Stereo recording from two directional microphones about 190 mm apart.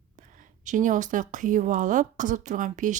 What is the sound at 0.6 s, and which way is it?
A woman's voice, 40° right (ahead or behind).